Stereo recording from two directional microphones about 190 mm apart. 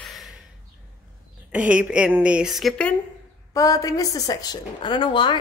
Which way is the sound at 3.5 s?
15° left (ahead or behind).